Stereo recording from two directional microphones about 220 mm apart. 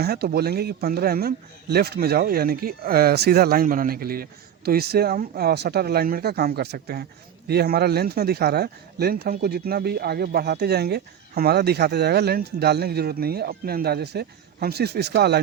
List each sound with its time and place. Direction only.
0.0 s speech: 45° right (ahead or behind)